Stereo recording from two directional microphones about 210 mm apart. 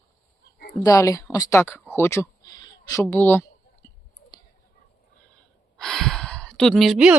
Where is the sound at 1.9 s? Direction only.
10° left (ahead or behind).